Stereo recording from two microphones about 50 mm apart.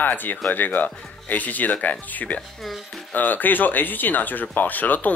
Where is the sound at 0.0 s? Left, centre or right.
Left.